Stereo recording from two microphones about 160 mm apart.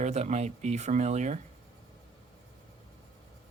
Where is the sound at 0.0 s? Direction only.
45° right (ahead or behind).